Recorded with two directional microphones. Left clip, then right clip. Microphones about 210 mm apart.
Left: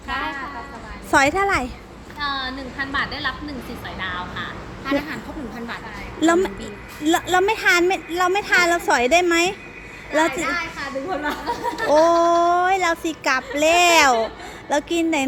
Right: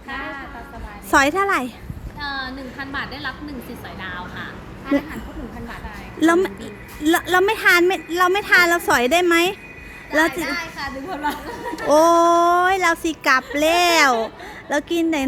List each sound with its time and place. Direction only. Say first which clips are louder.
1.1 s a woman's voice: right 1 dB; 10° right (ahead or behind)
4.9 s speech: right 1 dB; 50° left (ahead or behind)
6.1 s a woman's voice: right 1 dB; 15° right (ahead or behind)
10.4 s a woman's voice: left 1 dB; 40° right (ahead or behind)
11.9 s a woman's voice: right 2 dB; 20° right (ahead or behind)